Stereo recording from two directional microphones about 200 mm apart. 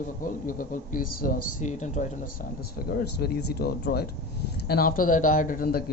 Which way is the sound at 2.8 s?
50° left (ahead or behind).